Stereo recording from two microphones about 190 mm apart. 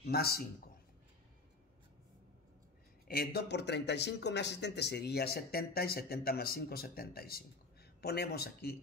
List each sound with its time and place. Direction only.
0.1 s speech: 55° left (ahead or behind)
3.1 s speech: 55° left (ahead or behind)